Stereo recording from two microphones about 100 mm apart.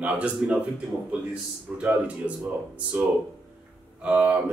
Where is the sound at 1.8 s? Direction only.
15° right (ahead or behind).